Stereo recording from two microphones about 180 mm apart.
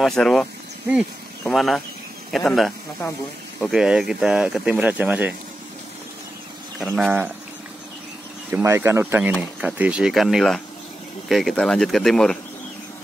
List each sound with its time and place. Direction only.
0.0 s speech: centre (ahead or behind)
7.0 s speech: 10° right (ahead or behind)
8.5 s speech: 15° right (ahead or behind); by 12.4 s 5° left (ahead or behind)